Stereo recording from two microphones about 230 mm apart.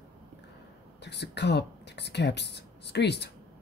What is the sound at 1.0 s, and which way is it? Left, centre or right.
Speech, left.